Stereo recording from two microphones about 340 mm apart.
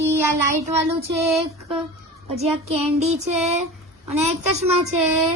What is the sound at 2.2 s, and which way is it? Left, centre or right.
Speech, centre.